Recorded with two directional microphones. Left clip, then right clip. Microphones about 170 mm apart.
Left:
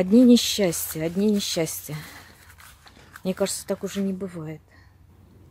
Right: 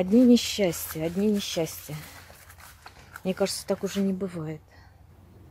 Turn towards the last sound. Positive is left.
turn(degrees=0)  # may be behind; listen again after turning